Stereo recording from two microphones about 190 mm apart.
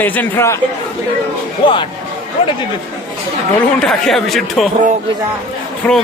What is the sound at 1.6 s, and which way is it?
Speech, 25° left (ahead or behind).